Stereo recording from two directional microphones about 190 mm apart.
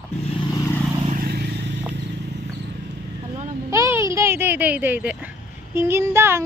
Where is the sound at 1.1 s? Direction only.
55° right (ahead or behind).